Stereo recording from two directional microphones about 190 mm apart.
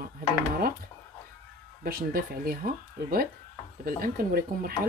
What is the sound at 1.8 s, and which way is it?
Speech, 55° right (ahead or behind).